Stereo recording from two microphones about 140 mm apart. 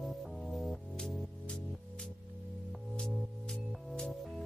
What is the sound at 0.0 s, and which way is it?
Music, centre (ahead or behind).